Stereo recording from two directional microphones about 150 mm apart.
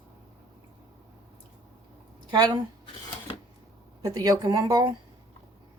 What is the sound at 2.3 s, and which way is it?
Speech, 30° right (ahead or behind).